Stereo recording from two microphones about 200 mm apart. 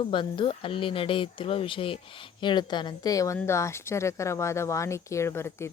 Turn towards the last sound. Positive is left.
turn(degrees=10)  # may be behind; listen again after turning